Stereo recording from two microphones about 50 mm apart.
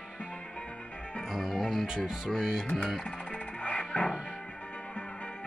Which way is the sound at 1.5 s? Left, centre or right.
Centre.